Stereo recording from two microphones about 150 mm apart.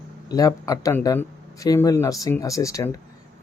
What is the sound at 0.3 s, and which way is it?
A man's voice, 25° left (ahead or behind).